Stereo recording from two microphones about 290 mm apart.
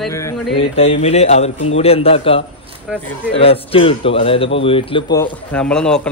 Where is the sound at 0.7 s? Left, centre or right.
Left.